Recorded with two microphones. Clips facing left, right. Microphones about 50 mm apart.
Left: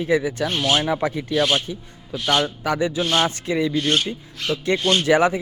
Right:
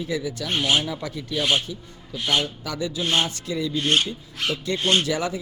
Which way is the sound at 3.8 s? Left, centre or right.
Centre.